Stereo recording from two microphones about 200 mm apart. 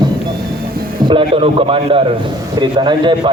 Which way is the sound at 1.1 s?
25° right (ahead or behind).